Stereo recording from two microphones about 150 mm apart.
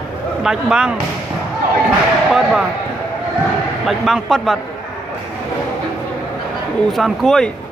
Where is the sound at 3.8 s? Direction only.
Centre (ahead or behind).